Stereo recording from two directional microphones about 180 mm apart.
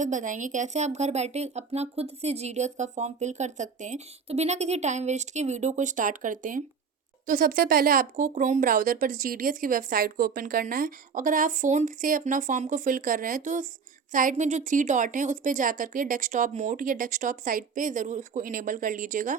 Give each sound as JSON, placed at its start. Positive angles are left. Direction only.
{"t": 0.0, "sound": "speech", "side_deg": -45}